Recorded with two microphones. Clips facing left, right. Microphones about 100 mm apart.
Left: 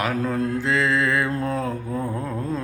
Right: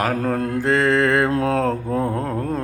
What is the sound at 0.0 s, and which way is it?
Mantra, 50° right (ahead or behind).